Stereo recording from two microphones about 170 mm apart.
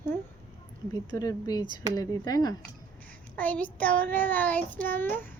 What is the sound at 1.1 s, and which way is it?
Speech, 20° left (ahead or behind).